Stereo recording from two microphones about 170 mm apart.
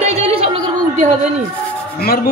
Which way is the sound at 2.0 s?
65° left (ahead or behind).